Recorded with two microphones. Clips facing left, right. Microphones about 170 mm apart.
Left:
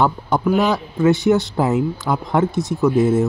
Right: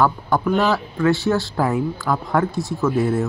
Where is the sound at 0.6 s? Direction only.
20° left (ahead or behind).